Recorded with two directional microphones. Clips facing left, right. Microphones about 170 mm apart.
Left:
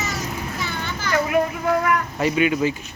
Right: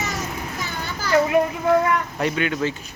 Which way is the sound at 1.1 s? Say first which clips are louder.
Right 3 dB; 25° right (ahead or behind).